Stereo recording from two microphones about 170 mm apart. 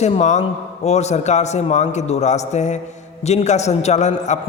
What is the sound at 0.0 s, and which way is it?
A man's voice, 40° left (ahead or behind).